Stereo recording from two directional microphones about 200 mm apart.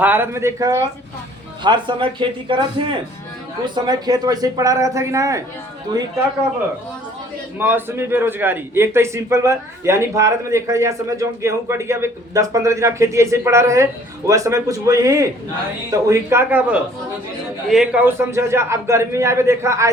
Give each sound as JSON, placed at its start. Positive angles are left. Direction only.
{"t": 0.0, "sound": "a man's voice", "side_deg": -10}
{"t": 7.6, "sound": "a man's voice", "side_deg": -10}